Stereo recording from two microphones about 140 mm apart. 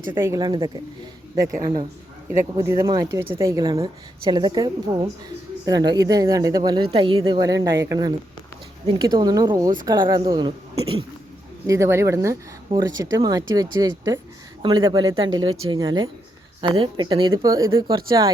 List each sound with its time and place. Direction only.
0.1 s a woman's voice: 20° right (ahead or behind)
11.6 s a woman's voice: 20° right (ahead or behind)